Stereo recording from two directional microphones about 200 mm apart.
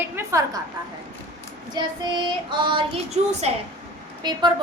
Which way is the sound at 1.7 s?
25° right (ahead or behind).